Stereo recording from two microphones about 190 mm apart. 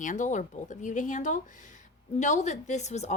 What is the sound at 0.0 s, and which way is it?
A woman's voice, 40° left (ahead or behind).